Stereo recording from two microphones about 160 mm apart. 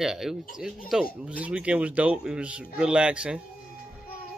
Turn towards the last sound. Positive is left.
turn(degrees=-5)  # may be behind; listen again after turning